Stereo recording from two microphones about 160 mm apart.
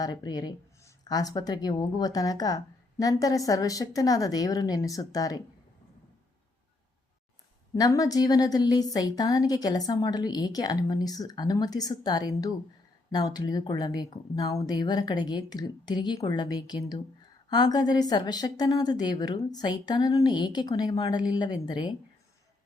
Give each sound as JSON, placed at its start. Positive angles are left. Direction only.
{"t": 0.0, "sound": "a woman's voice", "side_deg": 25}
{"t": 7.8, "sound": "a woman's voice", "side_deg": 20}